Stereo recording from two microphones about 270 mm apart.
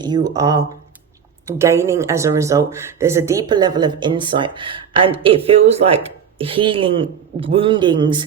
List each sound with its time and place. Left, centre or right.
0.0 s a woman's voice: centre